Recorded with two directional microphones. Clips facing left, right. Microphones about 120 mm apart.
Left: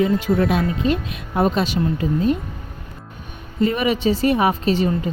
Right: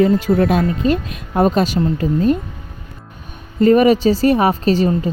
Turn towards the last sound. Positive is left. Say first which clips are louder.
# right 3 dB
turn(degrees=-40)  # may be behind; listen again after turning